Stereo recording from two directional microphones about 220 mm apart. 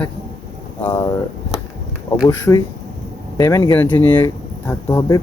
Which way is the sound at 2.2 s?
15° left (ahead or behind).